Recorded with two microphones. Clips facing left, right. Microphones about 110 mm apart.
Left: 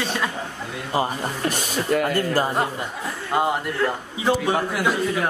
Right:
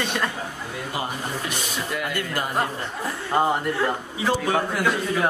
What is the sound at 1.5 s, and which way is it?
Speech, 45° left (ahead or behind).